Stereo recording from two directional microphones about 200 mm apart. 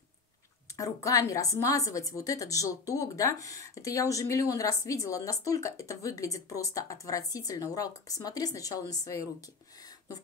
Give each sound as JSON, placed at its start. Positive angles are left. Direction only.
{"t": 0.7, "sound": "a woman's voice", "side_deg": 15}